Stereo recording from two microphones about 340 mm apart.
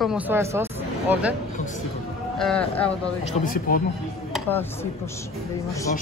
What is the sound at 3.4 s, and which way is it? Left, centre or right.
Speech, left.